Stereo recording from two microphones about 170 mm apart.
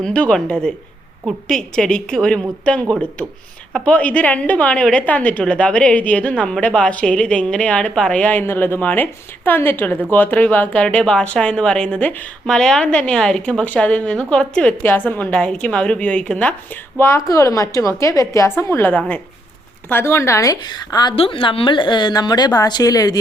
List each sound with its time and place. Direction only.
0.0 s a woman's voice: 5° left (ahead or behind); by 23.1 s 20° left (ahead or behind)